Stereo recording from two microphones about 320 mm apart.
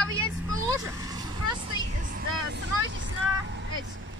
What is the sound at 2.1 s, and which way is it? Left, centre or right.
Speech, right.